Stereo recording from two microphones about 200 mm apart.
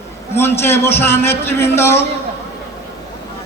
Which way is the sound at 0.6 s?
10° left (ahead or behind).